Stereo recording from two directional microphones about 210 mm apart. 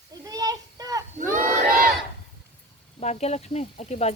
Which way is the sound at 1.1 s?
40° right (ahead or behind).